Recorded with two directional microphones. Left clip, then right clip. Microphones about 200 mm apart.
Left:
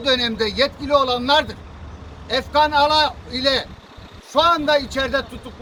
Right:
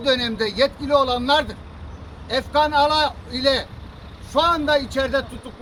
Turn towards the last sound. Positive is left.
turn(degrees=-5)  # may be behind; listen again after turning